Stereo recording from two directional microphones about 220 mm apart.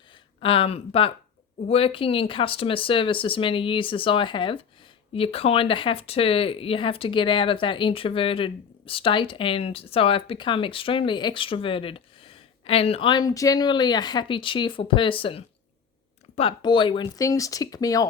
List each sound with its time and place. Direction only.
0.1 s speech: 25° left (ahead or behind)